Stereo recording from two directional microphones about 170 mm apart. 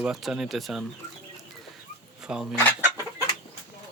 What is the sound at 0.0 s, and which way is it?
Speech, 5° right (ahead or behind).